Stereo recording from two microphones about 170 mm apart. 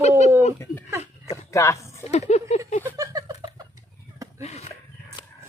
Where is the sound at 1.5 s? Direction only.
20° left (ahead or behind).